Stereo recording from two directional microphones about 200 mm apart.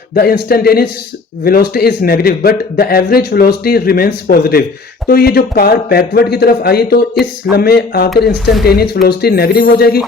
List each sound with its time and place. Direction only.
0.1 s a man's voice: 50° left (ahead or behind)